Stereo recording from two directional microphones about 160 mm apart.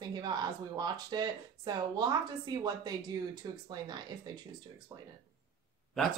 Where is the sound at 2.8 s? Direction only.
25° right (ahead or behind).